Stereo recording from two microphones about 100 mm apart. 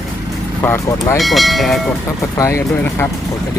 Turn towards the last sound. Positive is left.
turn(degrees=25)  # may be behind; listen again after turning